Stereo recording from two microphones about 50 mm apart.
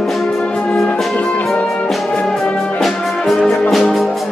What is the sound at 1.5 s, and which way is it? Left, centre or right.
Music, centre.